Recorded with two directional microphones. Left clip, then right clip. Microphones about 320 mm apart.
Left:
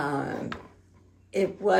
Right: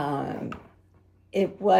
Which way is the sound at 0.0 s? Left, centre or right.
Right.